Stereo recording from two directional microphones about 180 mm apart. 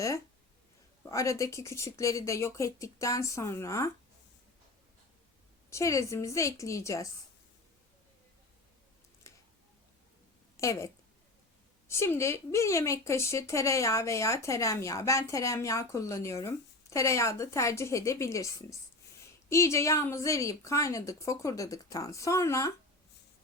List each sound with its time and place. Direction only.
1.0 s a woman's voice: 15° left (ahead or behind)
5.7 s a woman's voice: 15° left (ahead or behind)
9.2 s a sound: 15° left (ahead or behind)
10.6 s a woman's voice: 15° left (ahead or behind)